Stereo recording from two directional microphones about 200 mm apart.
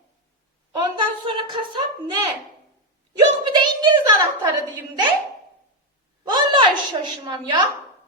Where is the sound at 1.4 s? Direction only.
25° right (ahead or behind).